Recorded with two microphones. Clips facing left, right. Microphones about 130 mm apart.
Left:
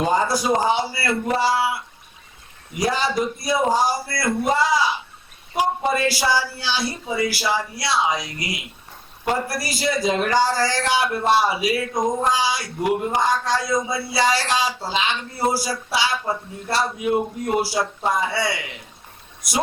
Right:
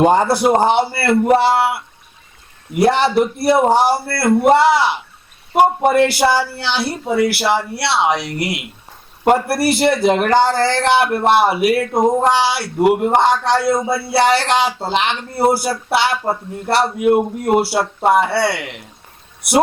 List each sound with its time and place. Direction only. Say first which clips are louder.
0.0 s a man's voice: right 7 dB; 65° right (ahead or behind)